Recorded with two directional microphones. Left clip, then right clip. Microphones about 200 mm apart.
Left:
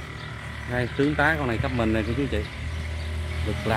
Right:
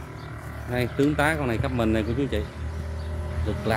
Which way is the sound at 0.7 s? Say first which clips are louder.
Right 1 dB; 10° right (ahead or behind).